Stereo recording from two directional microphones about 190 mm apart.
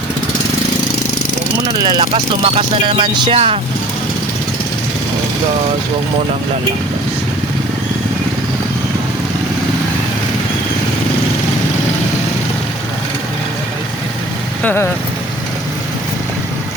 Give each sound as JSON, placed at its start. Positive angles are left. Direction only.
{"t": 1.8, "sound": "speech", "side_deg": -25}
{"t": 14.6, "sound": "speech", "side_deg": 10}